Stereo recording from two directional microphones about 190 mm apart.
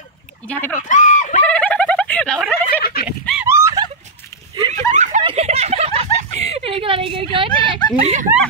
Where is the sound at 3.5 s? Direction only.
15° right (ahead or behind).